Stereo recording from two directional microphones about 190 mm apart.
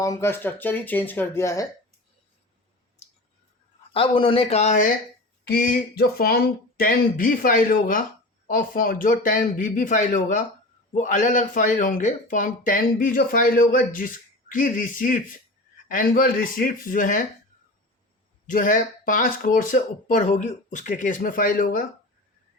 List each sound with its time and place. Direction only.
0.0 s speech: 15° left (ahead or behind)
3.0 s clicking: 35° left (ahead or behind)
3.9 s speech: 30° left (ahead or behind); by 17.2 s 45° left (ahead or behind)
18.4 s speech: 45° left (ahead or behind)